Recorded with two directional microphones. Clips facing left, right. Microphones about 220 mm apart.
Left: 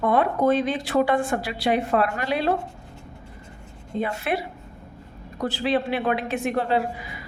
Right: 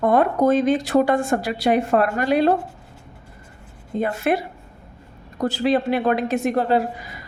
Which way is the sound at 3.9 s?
45° right (ahead or behind).